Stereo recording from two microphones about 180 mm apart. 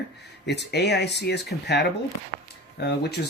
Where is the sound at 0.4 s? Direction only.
65° left (ahead or behind).